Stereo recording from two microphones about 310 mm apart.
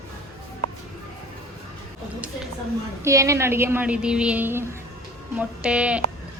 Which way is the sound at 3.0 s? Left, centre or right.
Centre.